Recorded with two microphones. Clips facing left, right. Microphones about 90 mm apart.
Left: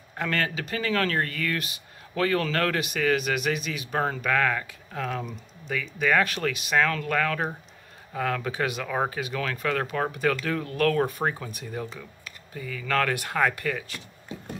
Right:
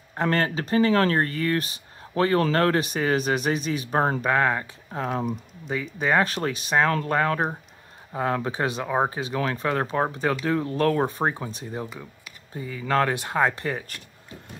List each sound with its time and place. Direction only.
0.1 s speech: 35° right (ahead or behind)
11.9 s computer keyboard: 10° right (ahead or behind)
12.5 s speech: 30° right (ahead or behind)